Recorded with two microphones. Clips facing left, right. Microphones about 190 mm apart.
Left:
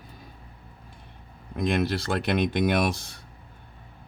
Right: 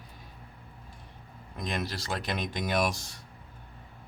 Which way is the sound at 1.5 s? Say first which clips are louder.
Left 9 dB; 60° left (ahead or behind).